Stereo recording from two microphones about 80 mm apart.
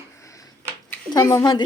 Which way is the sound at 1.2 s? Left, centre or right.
Left.